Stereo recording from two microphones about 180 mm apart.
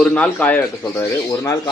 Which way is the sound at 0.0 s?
10° left (ahead or behind).